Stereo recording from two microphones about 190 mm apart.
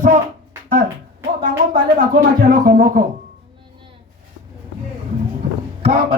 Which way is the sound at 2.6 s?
45° right (ahead or behind).